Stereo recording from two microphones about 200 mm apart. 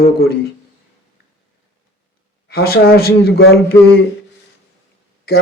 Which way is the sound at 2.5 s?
50° left (ahead or behind).